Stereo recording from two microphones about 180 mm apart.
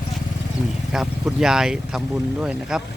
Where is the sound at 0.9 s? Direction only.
5° right (ahead or behind).